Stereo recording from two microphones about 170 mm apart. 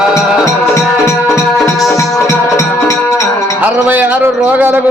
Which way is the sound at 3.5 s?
10° right (ahead or behind).